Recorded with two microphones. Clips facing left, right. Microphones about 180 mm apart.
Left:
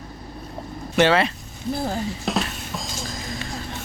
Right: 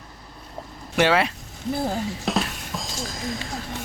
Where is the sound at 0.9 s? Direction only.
10° right (ahead or behind).